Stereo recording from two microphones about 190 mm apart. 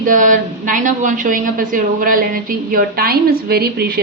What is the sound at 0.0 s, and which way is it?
A woman's voice, 45° right (ahead or behind).